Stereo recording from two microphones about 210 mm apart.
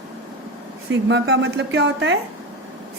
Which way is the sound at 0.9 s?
60° right (ahead or behind).